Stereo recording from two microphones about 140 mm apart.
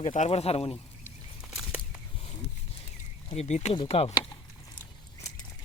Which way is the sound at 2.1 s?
45° left (ahead or behind).